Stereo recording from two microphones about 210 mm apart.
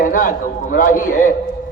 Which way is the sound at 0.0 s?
40° left (ahead or behind).